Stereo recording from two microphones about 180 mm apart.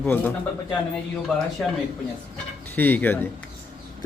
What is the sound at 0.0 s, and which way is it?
Speech, 10° left (ahead or behind).